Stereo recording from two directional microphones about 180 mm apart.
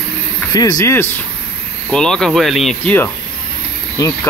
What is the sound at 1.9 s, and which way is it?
Speech, 5° left (ahead or behind).